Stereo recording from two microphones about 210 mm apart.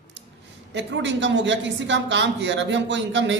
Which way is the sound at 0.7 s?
60° right (ahead or behind).